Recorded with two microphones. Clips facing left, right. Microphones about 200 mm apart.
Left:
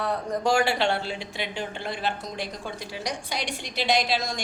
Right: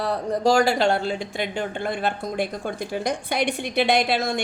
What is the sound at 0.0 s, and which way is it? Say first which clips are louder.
Speech: right 4 dB; 35° right (ahead or behind).